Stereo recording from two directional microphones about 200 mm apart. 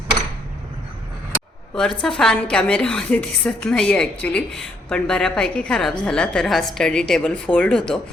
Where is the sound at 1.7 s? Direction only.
5° left (ahead or behind).